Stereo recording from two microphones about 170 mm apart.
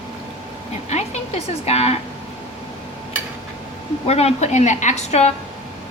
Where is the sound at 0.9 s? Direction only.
40° left (ahead or behind).